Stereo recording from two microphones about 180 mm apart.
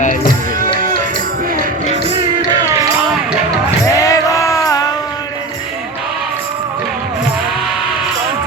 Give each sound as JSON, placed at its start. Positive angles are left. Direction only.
{"t": 0.0, "sound": "music", "side_deg": 45}
{"t": 2.0, "sound": "music", "side_deg": -30}
{"t": 3.8, "sound": "music", "side_deg": 20}